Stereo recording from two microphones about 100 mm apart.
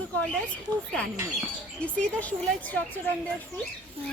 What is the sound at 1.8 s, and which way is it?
Speech, 15° left (ahead or behind).